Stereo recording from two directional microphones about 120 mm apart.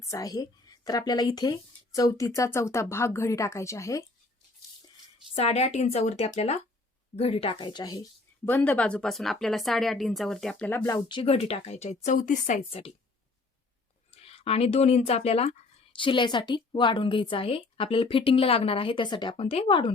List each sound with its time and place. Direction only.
0.1 s speech: 30° left (ahead or behind)
5.4 s a woman's voice: 60° left (ahead or behind); by 8.0 s 35° left (ahead or behind)
8.4 s a woman's voice: 15° left (ahead or behind)
11.1 s speech: 50° left (ahead or behind); by 12.5 s 90° left
12.8 s a woman's voice: 55° left (ahead or behind)
14.1 s speech: 55° left (ahead or behind)